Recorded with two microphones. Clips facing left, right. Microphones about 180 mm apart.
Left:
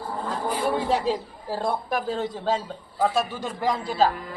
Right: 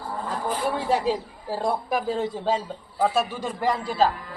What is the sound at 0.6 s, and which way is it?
A man's voice, centre (ahead or behind).